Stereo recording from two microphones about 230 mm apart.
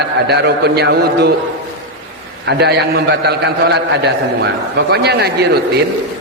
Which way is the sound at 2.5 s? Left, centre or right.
Right.